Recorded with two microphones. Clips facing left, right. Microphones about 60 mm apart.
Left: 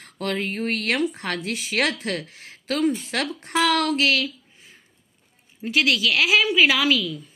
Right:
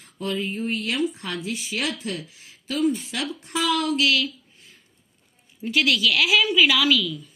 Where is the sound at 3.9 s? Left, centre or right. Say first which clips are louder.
Even; left.